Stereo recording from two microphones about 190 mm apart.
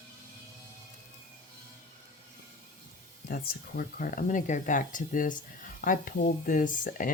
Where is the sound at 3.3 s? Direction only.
50° left (ahead or behind).